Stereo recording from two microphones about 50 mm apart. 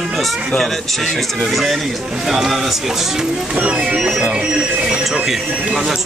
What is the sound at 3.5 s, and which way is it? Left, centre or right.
Speech, right.